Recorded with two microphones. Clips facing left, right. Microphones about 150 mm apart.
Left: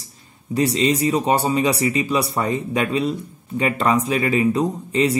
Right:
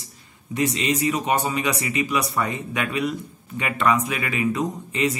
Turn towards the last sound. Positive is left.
turn(degrees=30)  # may be behind; listen again after turning